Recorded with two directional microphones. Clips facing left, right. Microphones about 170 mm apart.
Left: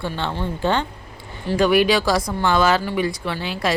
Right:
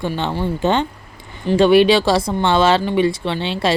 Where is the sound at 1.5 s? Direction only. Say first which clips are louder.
Right 5 dB; 25° right (ahead or behind).